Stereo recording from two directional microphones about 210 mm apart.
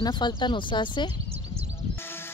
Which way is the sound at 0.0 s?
20° left (ahead or behind).